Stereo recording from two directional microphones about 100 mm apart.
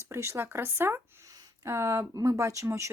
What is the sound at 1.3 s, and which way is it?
Speech, 35° right (ahead or behind).